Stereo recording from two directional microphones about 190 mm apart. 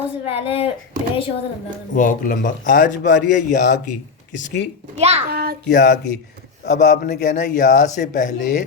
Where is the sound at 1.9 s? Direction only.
45° left (ahead or behind).